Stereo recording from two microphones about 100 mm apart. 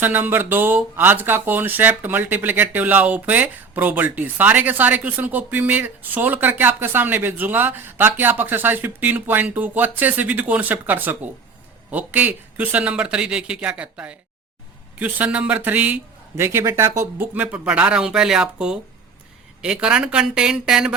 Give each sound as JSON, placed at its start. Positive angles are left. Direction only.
{"t": 0.0, "sound": "speech", "side_deg": -20}
{"t": 17.3, "sound": "speech", "side_deg": -15}